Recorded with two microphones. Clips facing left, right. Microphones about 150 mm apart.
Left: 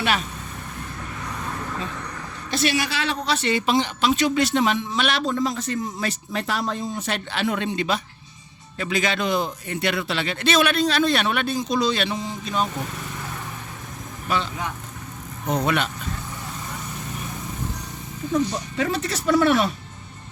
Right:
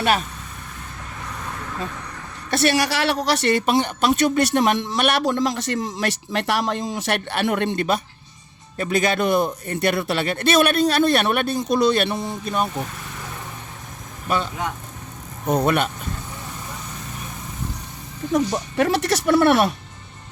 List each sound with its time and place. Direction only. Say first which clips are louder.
2.5 s a man's voice: right 4 dB; 70° right (ahead or behind)
15.4 s a man's voice: right 3 dB; 50° right (ahead or behind)
18.3 s speech: right 3 dB; 80° right